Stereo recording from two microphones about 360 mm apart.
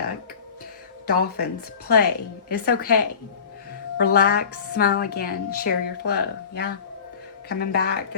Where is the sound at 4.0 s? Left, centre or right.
Left.